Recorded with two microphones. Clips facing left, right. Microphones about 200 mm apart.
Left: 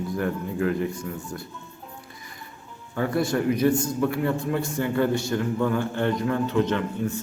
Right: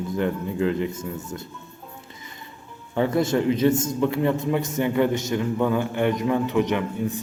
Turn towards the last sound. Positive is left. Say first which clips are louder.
# right 1 dB
turn(degrees=-15)  # may be behind; listen again after turning